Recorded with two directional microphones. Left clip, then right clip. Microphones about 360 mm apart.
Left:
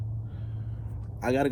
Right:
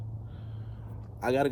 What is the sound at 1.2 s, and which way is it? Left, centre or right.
Speech, centre.